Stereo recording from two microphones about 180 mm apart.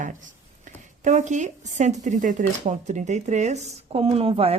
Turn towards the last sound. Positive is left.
turn(degrees=-30)  # may be behind; listen again after turning